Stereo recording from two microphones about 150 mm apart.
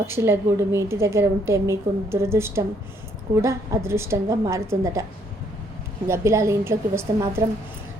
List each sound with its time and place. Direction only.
0.1 s a woman's voice: 20° right (ahead or behind)
6.1 s a woman's voice: 20° right (ahead or behind)